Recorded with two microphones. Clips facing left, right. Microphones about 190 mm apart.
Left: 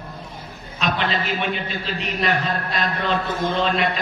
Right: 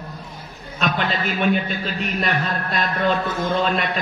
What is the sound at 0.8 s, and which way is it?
A man's voice, 45° right (ahead or behind).